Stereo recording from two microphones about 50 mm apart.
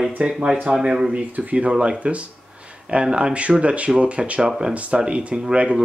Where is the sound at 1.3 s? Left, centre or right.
Right.